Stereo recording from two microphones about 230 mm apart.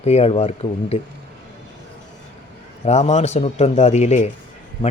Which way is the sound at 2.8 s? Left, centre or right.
Left.